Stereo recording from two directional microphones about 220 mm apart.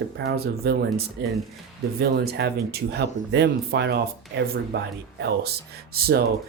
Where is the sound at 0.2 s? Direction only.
45° right (ahead or behind).